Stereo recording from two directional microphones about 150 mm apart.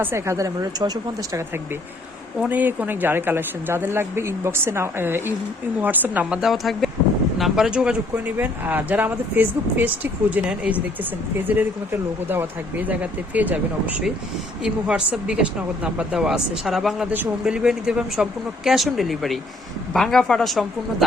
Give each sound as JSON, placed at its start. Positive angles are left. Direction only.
{"t": 0.0, "sound": "a woman's voice", "side_deg": -15}
{"t": 2.4, "sound": "speech", "side_deg": -10}